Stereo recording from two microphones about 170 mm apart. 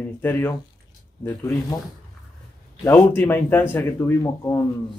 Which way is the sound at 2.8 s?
15° left (ahead or behind).